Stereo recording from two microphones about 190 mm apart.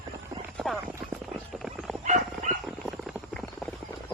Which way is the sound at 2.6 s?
Centre (ahead or behind).